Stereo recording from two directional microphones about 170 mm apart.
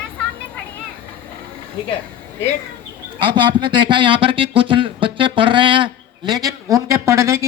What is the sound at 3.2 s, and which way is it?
Speech, 30° right (ahead or behind).